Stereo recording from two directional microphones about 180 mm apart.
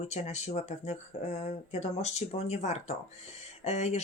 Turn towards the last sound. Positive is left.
turn(degrees=40)  # may be behind; listen again after turning